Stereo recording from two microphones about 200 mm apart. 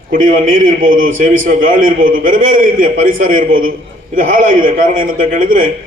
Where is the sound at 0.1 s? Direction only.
45° right (ahead or behind).